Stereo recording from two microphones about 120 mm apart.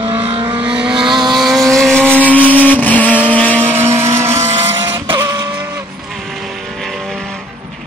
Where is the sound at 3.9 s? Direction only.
20° right (ahead or behind).